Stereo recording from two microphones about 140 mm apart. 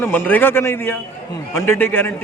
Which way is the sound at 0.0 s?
10° left (ahead or behind).